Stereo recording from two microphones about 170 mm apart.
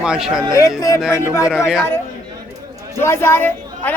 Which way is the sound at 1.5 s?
5° right (ahead or behind).